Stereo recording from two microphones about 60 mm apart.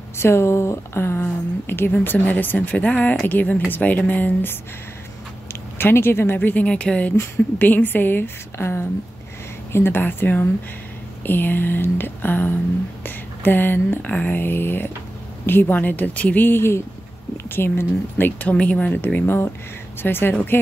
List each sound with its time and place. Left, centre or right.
0.2 s speech: left
5.8 s speech: left
6.6 s speech: centre
16.4 s speech: left
19.1 s speech: left